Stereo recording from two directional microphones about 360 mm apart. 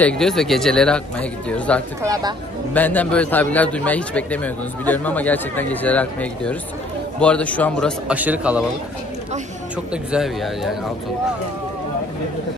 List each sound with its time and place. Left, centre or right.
0.0 s a man's voice: centre
10.1 s a man's voice: centre